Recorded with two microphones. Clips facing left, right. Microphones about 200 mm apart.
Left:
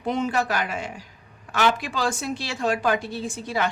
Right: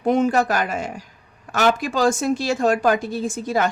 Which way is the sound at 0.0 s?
50° right (ahead or behind).